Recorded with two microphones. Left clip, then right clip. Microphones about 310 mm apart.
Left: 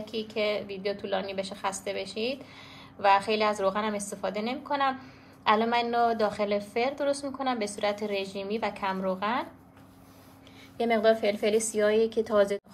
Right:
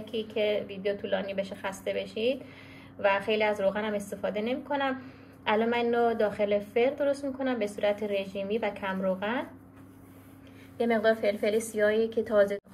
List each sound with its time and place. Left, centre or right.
0.1 s a woman's voice: centre
10.8 s a woman's voice: centre